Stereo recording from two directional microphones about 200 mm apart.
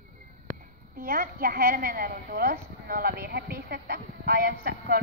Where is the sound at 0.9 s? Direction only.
45° right (ahead or behind).